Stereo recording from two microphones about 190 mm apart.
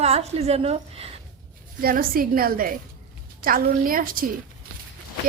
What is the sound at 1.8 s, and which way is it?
A woman's voice, 50° right (ahead or behind).